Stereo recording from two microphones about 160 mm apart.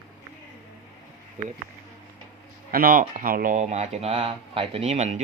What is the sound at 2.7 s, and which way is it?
A man's voice, 65° right (ahead or behind).